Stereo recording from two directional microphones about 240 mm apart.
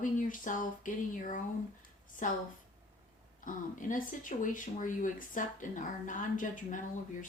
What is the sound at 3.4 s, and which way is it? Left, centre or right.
Speech, left.